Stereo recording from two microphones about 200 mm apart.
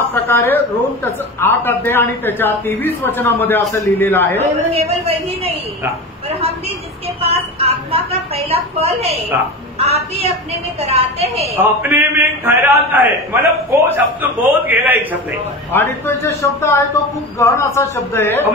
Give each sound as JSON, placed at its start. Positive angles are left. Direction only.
{"t": 0.1, "sound": "a man's voice", "side_deg": 10}
{"t": 4.7, "sound": "a woman's voice", "side_deg": -30}
{"t": 7.2, "sound": "a woman's voice", "side_deg": -30}
{"t": 11.5, "sound": "a man's voice", "side_deg": -10}
{"t": 15.7, "sound": "a man's voice", "side_deg": 10}